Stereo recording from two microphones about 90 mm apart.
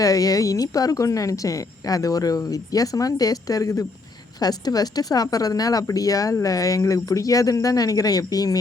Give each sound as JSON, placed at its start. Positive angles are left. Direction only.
{"t": 0.0, "sound": "a woman's voice", "side_deg": 40}
{"t": 4.4, "sound": "a woman's voice", "side_deg": 45}